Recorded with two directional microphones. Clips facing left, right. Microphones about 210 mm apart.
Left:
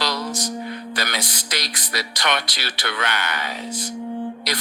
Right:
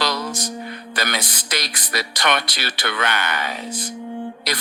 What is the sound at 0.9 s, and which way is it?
Speech, 55° right (ahead or behind).